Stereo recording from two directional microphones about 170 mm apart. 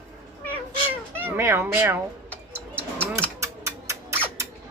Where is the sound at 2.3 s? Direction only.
10° left (ahead or behind).